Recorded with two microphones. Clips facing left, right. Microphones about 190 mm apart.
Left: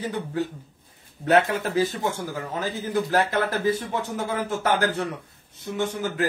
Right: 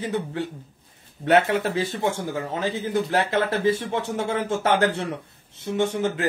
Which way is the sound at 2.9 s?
25° right (ahead or behind).